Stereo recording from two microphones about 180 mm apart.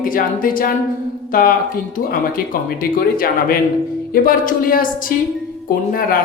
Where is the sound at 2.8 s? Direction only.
55° left (ahead or behind).